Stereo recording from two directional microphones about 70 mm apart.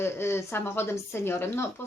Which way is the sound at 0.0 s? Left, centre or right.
Left.